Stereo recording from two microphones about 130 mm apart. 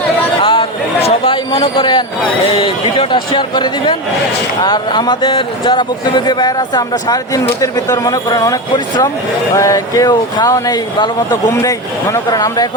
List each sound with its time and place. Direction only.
0.4 s a sound: 45° left (ahead or behind)
2.6 s a man's voice: 45° left (ahead or behind); by 11.1 s 30° left (ahead or behind)
12.1 s speech: 30° left (ahead or behind)